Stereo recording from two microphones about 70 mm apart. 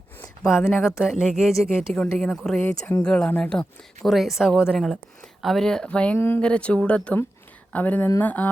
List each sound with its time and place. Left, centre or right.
0.4 s speech: left
1.0 s speech: centre
4.0 s speech: centre
6.1 s speech: left
6.4 s speech: centre